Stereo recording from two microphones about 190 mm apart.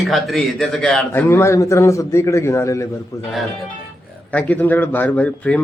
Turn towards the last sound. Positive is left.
turn(degrees=5)  # may be behind; listen again after turning